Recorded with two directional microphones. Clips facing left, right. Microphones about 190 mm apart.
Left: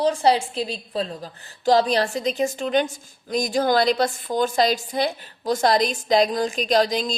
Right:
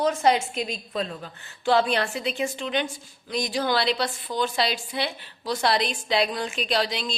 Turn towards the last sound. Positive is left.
turn(degrees=40)  # may be behind; listen again after turning